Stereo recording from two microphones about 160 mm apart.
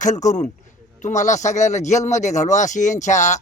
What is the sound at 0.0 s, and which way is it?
A man's voice, 50° left (ahead or behind).